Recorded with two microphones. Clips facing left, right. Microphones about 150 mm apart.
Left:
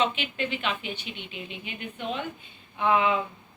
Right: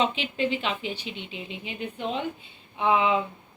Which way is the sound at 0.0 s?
30° right (ahead or behind).